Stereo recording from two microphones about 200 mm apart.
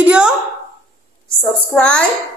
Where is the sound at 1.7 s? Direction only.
5° left (ahead or behind).